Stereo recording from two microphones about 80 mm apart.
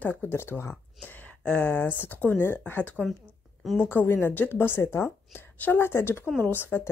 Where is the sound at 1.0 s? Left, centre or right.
Centre.